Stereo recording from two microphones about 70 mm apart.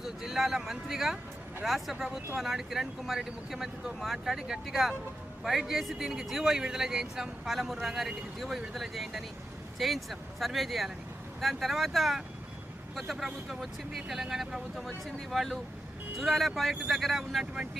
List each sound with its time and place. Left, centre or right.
0.0 s speech: centre
17.4 s speech: centre